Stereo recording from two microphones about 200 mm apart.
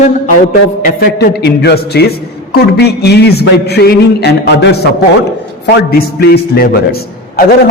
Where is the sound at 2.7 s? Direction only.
55° left (ahead or behind).